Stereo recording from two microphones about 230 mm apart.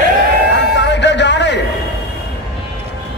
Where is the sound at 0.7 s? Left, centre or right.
Left.